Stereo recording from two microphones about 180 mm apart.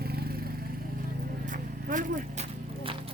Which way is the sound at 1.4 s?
45° right (ahead or behind).